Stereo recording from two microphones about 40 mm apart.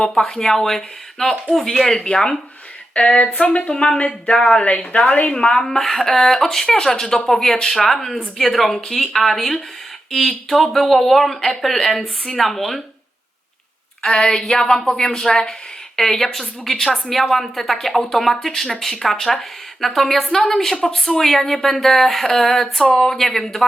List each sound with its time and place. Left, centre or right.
0.2 s a woman's voice: centre
3.0 s a woman's voice: left
4.9 s a woman's voice: left
5.3 s speech: centre
6.7 s a woman's voice: centre
14.0 s a woman's voice: centre